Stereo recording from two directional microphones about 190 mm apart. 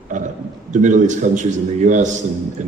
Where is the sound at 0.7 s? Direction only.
40° right (ahead or behind).